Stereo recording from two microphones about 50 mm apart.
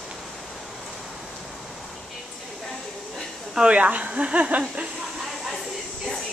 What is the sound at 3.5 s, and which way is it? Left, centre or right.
Speech, right.